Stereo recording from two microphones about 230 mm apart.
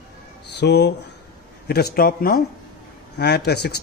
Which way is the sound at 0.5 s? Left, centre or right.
Left.